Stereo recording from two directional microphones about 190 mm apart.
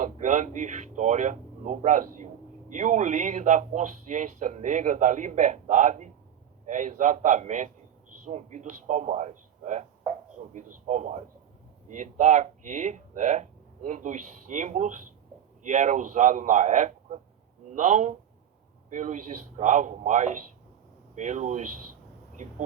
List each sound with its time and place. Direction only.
0.0 s speech: 40° right (ahead or behind)